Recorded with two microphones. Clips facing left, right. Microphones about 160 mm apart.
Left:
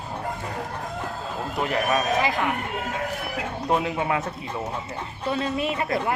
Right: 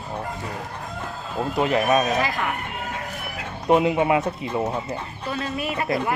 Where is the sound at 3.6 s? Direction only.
15° right (ahead or behind).